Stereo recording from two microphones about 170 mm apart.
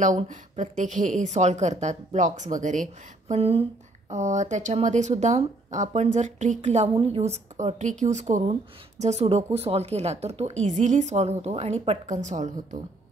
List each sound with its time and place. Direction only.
0.0 s a woman's voice: 45° right (ahead or behind)
3.3 s a woman's voice: 35° right (ahead or behind)